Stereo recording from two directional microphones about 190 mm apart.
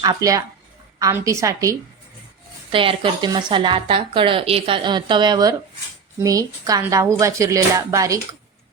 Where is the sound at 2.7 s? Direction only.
25° right (ahead or behind).